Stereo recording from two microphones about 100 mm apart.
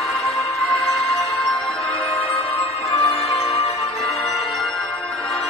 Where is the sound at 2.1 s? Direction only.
65° left (ahead or behind).